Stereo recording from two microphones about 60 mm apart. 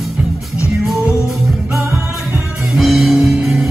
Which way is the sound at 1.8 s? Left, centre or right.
Right.